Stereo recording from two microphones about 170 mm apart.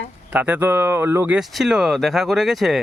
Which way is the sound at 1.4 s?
5° right (ahead or behind).